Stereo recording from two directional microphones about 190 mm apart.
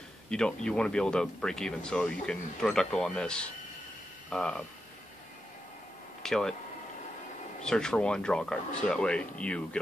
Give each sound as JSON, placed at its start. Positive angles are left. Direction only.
{"t": 0.3, "sound": "speech", "side_deg": 5}
{"t": 6.2, "sound": "speech", "side_deg": 5}
{"t": 7.6, "sound": "speech", "side_deg": 5}